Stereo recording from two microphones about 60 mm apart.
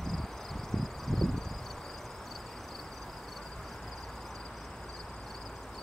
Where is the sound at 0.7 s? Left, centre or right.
Centre.